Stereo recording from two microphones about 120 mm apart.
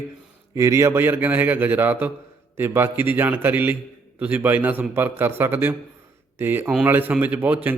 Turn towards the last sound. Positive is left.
turn(degrees=-15)  # may be behind; listen again after turning